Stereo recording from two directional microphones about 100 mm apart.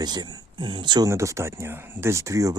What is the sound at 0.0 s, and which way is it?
Speech, 45° right (ahead or behind).